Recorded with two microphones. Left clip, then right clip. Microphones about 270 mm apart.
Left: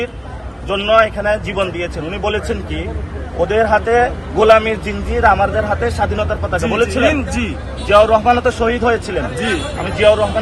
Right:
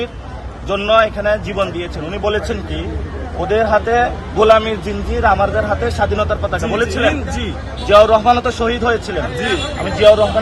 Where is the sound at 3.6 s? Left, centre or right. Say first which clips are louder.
Left 1 dB; centre.